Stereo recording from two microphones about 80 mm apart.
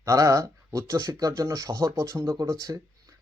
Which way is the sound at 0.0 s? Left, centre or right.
Right.